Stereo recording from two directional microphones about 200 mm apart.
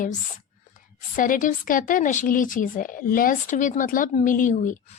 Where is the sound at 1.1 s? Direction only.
40° left (ahead or behind).